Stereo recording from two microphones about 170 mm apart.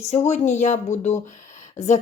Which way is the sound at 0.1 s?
40° left (ahead or behind).